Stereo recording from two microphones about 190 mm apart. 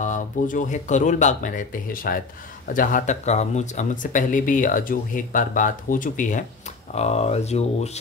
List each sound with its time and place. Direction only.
0.0 s speech: 40° left (ahead or behind)